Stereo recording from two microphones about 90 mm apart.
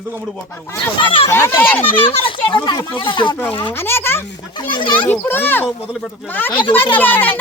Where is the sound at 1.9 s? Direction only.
70° left (ahead or behind).